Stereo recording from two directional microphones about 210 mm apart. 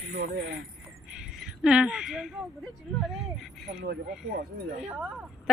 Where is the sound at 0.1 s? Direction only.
50° right (ahead or behind).